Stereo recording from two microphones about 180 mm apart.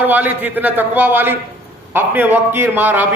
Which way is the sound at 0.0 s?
10° right (ahead or behind).